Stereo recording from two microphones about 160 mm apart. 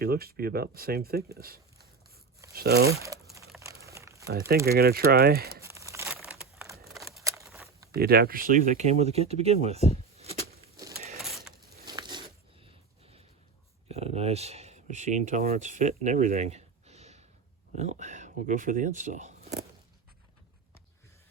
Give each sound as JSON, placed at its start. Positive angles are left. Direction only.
{"t": 0.0, "sound": "speech", "side_deg": -70}
{"t": 2.9, "sound": "speech", "side_deg": -20}
{"t": 3.6, "sound": "crumpling", "side_deg": -20}
{"t": 4.3, "sound": "speech", "side_deg": -75}
{"t": 5.6, "sound": "crumpling", "side_deg": -20}
{"t": 6.1, "sound": "crushing", "side_deg": -5}
{"t": 7.4, "sound": "a sound", "side_deg": 0}
{"t": 7.9, "sound": "speech", "side_deg": -75}
{"t": 8.9, "sound": "speech", "side_deg": -40}
{"t": 10.2, "sound": "a sound", "side_deg": -40}
{"t": 11.2, "sound": "a sound", "side_deg": 0}
{"t": 11.9, "sound": "a sound", "side_deg": -25}
{"t": 13.8, "sound": "speech", "side_deg": -40}